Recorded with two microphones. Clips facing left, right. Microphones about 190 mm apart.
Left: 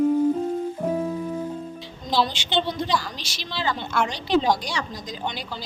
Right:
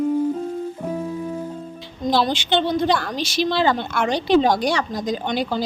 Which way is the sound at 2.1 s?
55° right (ahead or behind).